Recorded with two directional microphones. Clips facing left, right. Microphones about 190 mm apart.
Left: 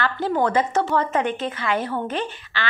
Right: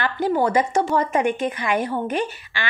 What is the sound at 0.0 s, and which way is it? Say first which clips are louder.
A woman's voice: right 1 dB; 10° right (ahead or behind).